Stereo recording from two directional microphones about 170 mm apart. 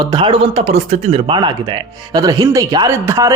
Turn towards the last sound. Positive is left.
turn(degrees=-20)  # may be behind; listen again after turning